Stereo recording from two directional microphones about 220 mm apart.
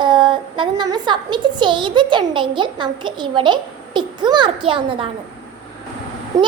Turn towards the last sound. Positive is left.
turn(degrees=-15)  # may be behind; listen again after turning